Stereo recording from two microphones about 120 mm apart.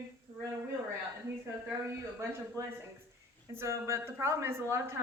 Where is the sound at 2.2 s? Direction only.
25° right (ahead or behind).